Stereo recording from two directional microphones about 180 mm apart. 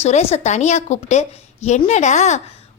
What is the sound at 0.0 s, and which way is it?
A woman's voice, 35° left (ahead or behind).